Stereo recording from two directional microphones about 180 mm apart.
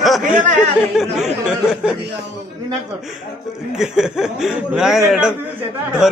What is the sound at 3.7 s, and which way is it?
Speech, 5° right (ahead or behind).